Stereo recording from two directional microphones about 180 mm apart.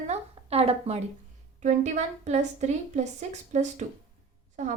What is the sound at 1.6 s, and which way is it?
A woman's voice, 40° right (ahead or behind).